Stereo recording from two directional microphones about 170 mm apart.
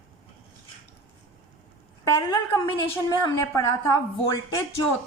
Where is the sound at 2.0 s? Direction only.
20° left (ahead or behind).